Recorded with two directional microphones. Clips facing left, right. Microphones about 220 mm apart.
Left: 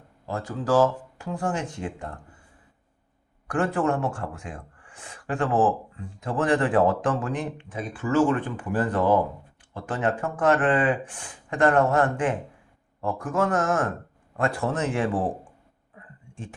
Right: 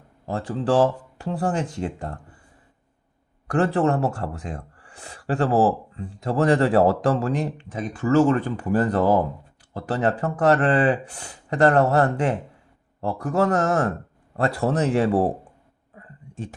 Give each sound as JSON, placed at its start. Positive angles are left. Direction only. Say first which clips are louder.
{"t": 0.3, "sound": "speech", "louder": "right 2 dB", "side_deg": -30}
{"t": 3.4, "sound": "speech", "louder": "right 4 dB", "side_deg": -35}
{"t": 16.3, "sound": "speech", "louder": "right 5 dB", "side_deg": -40}